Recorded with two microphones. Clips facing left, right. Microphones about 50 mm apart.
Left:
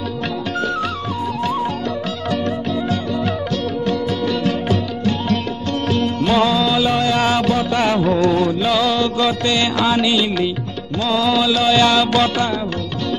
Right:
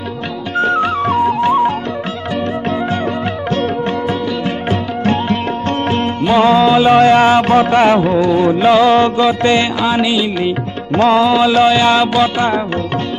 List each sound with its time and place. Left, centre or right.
0.6 s music: right
1.0 s music: right
1.4 s music: right
6.4 s music: right
8.2 s music: centre
8.5 s music: right
9.8 s music: centre
11.2 s music: right